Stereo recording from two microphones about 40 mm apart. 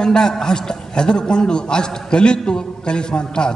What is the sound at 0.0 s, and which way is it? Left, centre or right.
A man's voice, centre.